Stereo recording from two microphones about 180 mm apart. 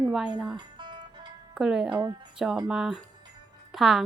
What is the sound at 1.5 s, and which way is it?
A woman's voice, 5° right (ahead or behind).